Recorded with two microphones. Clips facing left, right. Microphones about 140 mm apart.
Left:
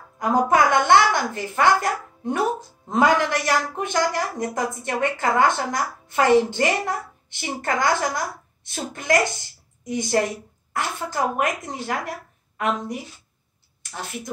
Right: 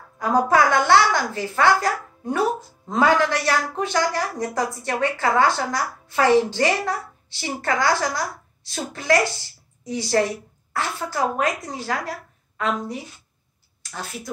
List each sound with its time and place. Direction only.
0.2 s a woman's voice: 20° left (ahead or behind)
13.9 s a woman's voice: 20° left (ahead or behind)